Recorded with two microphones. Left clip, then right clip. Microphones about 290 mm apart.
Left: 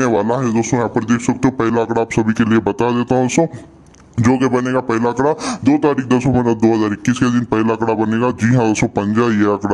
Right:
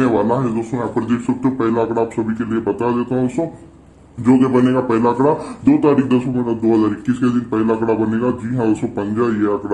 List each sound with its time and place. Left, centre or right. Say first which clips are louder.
0.0 s a man's voice: left 1 dB; left